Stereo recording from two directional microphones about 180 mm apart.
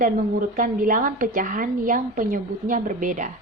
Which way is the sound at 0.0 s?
50° right (ahead or behind).